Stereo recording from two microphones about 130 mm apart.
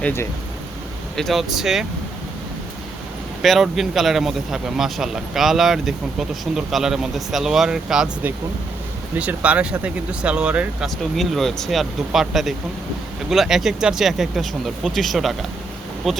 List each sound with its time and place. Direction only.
0.0 s speech: 15° left (ahead or behind)
1.1 s a man's voice: centre (ahead or behind)
3.4 s a man's voice: centre (ahead or behind)